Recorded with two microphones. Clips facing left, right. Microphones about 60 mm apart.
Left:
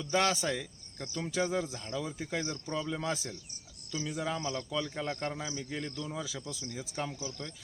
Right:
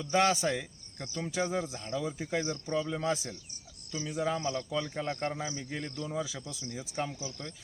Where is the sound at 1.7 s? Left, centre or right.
Right.